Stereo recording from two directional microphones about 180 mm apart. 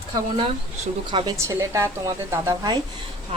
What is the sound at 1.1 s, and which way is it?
Speech, 30° right (ahead or behind).